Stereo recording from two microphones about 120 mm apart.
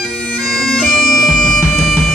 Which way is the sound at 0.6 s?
Centre (ahead or behind).